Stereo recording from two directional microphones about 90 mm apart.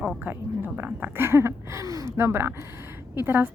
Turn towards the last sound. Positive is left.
turn(degrees=-25)  # may be behind; listen again after turning